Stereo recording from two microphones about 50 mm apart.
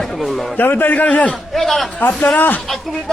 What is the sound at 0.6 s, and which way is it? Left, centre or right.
Speech, left.